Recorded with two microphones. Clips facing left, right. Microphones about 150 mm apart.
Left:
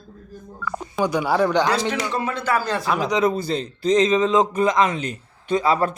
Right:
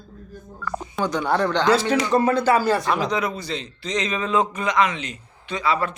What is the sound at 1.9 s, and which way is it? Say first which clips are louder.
Speech: right 5 dB; 40° right (ahead or behind).